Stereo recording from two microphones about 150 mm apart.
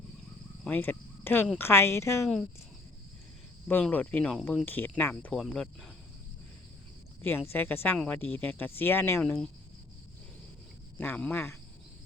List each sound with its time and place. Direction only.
0.6 s speech: 10° left (ahead or behind)
3.7 s speech: 10° left (ahead or behind)
5.4 s speech: centre (ahead or behind)
7.2 s speech: 15° left (ahead or behind)
10.9 s speech: 10° left (ahead or behind)